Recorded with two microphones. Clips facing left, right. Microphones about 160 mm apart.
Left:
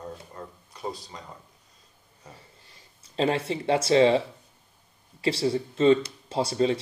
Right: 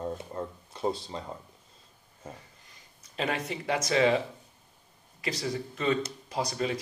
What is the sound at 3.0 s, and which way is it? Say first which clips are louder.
Speech: left 6 dB; 30° left (ahead or behind).